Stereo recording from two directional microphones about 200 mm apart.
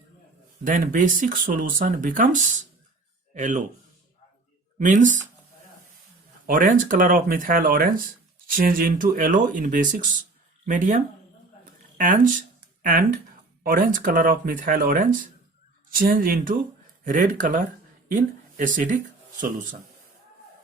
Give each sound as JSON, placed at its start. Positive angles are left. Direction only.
{"t": 0.6, "sound": "speech", "side_deg": -40}
{"t": 4.8, "sound": "speech", "side_deg": -40}
{"t": 6.5, "sound": "speech", "side_deg": -45}